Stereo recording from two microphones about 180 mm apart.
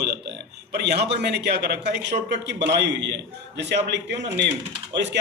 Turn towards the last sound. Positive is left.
turn(degrees=-75)  # may be behind; listen again after turning